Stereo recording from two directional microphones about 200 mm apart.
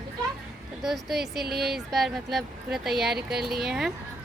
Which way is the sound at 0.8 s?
Centre (ahead or behind).